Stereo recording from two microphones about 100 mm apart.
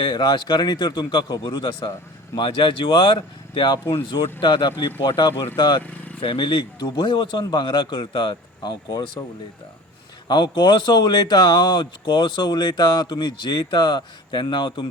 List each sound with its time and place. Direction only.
0.0 s speech: 50° left (ahead or behind)
5.8 s a sound: 15° left (ahead or behind)
6.1 s speech: 55° left (ahead or behind)
10.2 s speech: 50° left (ahead or behind)